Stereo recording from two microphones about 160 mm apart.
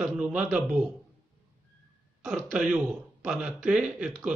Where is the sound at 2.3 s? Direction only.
5° right (ahead or behind).